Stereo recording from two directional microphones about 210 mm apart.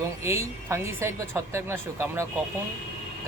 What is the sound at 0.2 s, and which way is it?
Speech, 15° right (ahead or behind).